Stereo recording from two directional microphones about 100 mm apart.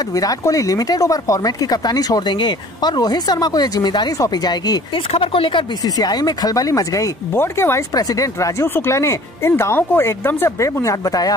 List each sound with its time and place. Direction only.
0.1 s speech: 35° left (ahead or behind)
5.1 s speech: 60° left (ahead or behind)
5.9 s speech: 40° left (ahead or behind)